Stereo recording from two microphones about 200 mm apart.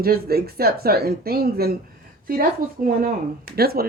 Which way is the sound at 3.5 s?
50° right (ahead or behind).